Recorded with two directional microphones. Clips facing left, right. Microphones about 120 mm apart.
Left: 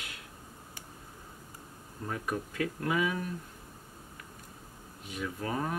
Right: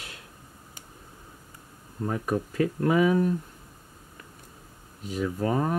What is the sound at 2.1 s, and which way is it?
Speech, 35° right (ahead or behind).